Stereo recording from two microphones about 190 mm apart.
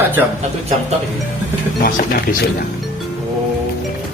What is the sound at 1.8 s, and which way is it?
Speech, 50° left (ahead or behind).